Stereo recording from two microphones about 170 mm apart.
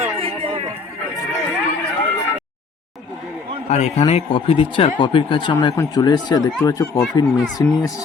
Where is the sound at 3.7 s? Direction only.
40° left (ahead or behind).